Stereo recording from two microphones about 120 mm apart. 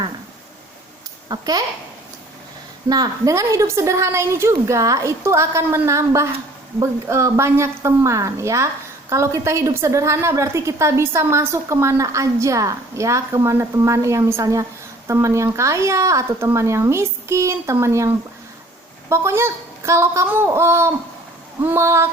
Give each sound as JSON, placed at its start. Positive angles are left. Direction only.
{"t": 1.3, "sound": "a woman's voice", "side_deg": -35}
{"t": 2.9, "sound": "a woman's voice", "side_deg": -30}